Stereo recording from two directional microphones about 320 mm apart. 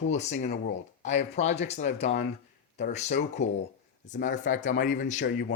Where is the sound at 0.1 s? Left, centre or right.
Left.